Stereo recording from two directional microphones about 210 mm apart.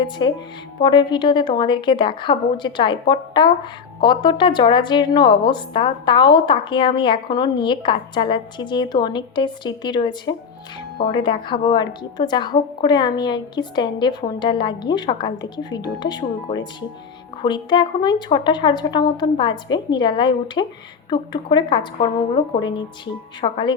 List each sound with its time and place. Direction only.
0.0 s speech: 20° left (ahead or behind)